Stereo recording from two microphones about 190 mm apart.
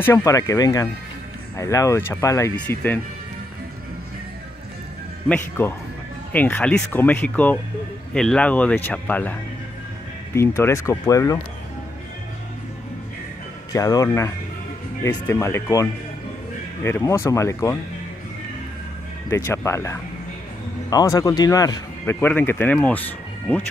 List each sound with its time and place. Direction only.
0.0 s speech: 15° left (ahead or behind)
5.3 s speech: 10° left (ahead or behind)
13.7 s speech: 20° left (ahead or behind)
19.2 s speech: 15° left (ahead or behind)